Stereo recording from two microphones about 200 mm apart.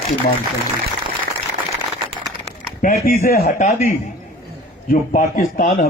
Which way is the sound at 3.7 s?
35° left (ahead or behind).